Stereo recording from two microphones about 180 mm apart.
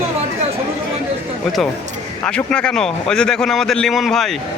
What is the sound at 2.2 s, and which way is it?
A man's voice, 5° left (ahead or behind).